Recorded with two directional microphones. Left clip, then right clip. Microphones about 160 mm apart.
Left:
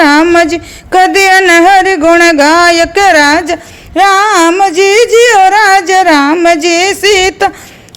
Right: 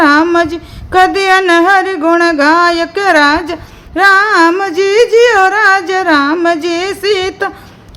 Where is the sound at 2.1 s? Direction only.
30° left (ahead or behind).